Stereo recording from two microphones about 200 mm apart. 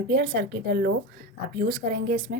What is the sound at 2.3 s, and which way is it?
Speech, 60° right (ahead or behind).